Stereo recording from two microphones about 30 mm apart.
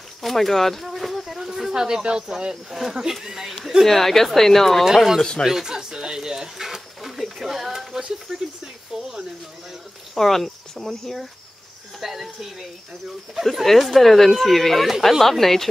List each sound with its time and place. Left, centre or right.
0.2 s speech: centre
0.8 s a sound: centre
1.4 s a sound: centre
2.0 s speech: right
2.5 s speech: centre
3.8 s speech: centre
4.8 s speech: centre
6.6 s a sound: centre
8.9 s a sound: right
10.1 s speech: centre
12.0 s speech: centre
13.7 s speech: centre